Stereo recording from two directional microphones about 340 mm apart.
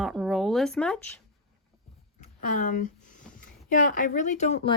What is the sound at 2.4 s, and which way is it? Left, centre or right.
Speech, left.